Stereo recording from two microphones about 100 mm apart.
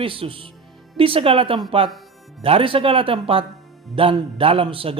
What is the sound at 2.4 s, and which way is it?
A man's voice, 65° right (ahead or behind).